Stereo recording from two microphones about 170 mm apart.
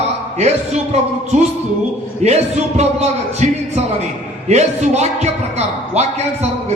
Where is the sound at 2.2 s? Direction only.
40° right (ahead or behind).